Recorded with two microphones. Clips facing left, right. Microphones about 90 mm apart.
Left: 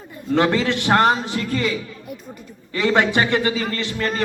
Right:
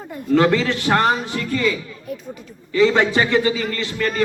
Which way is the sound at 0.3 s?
30° left (ahead or behind).